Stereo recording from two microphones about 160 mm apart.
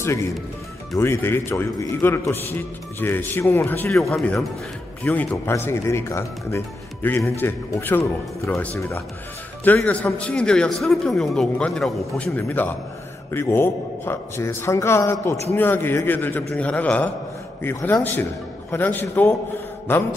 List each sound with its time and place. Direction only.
0.0 s speech: 15° left (ahead or behind)